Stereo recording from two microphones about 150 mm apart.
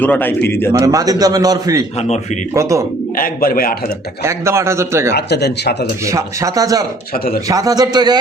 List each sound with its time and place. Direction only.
0.0 s a man's voice: 10° left (ahead or behind)
0.7 s a man's voice: 25° right (ahead or behind)
2.0 s speech: 45° left (ahead or behind)
2.6 s a man's voice: 20° right (ahead or behind)
3.2 s a man's voice: 70° left (ahead or behind)
4.2 s a man's voice: 20° right (ahead or behind)
5.1 s speech: 90° left
6.1 s a man's voice: 20° right (ahead or behind)